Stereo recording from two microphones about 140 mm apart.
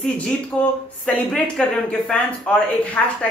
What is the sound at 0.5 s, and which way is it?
A woman's voice, centre (ahead or behind).